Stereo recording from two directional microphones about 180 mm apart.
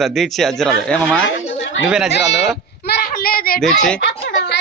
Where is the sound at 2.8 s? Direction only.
60° left (ahead or behind).